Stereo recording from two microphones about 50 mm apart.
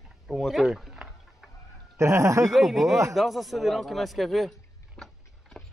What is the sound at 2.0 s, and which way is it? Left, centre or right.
Speech, right.